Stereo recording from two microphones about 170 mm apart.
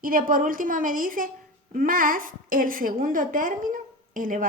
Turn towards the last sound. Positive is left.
turn(degrees=-50)  # may be behind; listen again after turning